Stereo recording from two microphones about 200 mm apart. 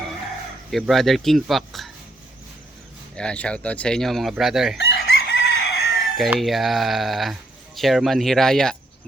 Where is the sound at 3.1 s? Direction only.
5° left (ahead or behind).